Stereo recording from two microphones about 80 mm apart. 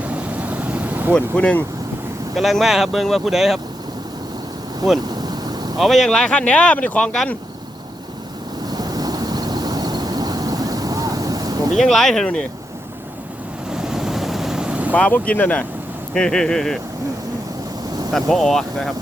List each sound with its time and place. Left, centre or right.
0.0 s vehicle: centre
1.1 s speech: centre
2.3 s speech: centre
5.0 s vehicle: right
5.7 s speech: centre
8.7 s vehicle: right
11.7 s speech: centre
13.7 s boat: centre
14.9 s speech: centre
18.1 s speech: centre